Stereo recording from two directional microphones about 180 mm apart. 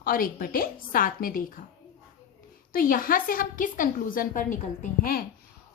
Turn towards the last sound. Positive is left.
turn(degrees=55)  # may be behind; listen again after turning